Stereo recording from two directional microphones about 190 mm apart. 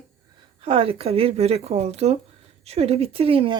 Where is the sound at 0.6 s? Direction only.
30° right (ahead or behind).